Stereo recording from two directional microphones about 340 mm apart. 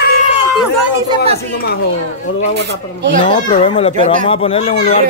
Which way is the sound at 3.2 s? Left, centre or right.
Centre.